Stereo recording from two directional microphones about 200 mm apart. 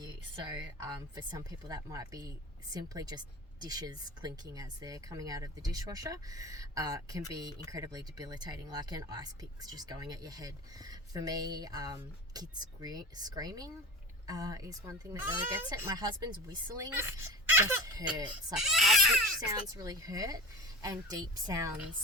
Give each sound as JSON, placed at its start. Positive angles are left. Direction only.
{"t": 0.5, "sound": "speech", "side_deg": -20}
{"t": 18.5, "sound": "speech", "side_deg": 0}
{"t": 19.5, "sound": "speech", "side_deg": -20}